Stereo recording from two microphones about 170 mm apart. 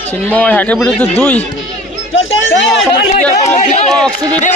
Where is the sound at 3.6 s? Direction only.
40° left (ahead or behind).